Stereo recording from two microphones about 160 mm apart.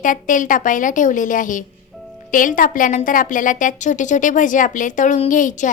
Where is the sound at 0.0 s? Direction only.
55° left (ahead or behind).